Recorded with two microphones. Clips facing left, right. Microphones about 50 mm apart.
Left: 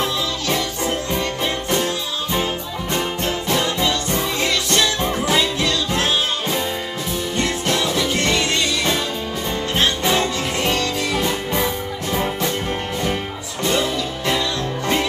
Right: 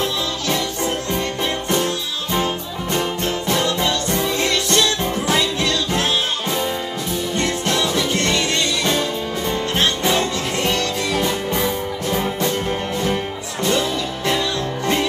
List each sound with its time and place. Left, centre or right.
0.0 s music: centre
2.3 s music: centre
7.3 s music: centre
7.8 s music: centre
8.1 s music: centre
10.0 s music: centre
13.7 s music: centre